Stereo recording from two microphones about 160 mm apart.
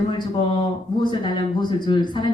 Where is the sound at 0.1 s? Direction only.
30° left (ahead or behind).